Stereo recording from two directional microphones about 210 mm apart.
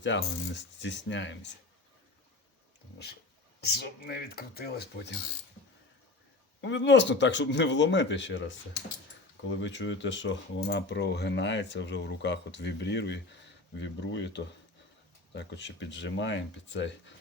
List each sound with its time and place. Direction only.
0.1 s speech: 60° left (ahead or behind)
3.6 s speech: 50° left (ahead or behind)
6.6 s speech: 55° left (ahead or behind)